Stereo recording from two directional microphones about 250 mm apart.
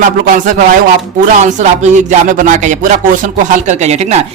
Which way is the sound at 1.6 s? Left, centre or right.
Right.